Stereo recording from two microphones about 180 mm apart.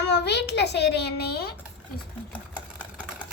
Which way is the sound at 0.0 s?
70° left (ahead or behind).